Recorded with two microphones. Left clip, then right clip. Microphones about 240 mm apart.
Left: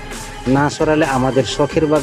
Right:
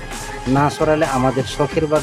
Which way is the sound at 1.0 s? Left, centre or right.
Centre.